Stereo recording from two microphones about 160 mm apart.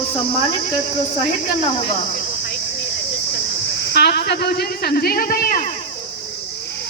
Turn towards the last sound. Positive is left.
turn(degrees=65)  # may be behind; listen again after turning